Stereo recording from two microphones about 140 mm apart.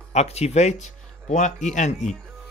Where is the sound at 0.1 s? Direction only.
50° left (ahead or behind).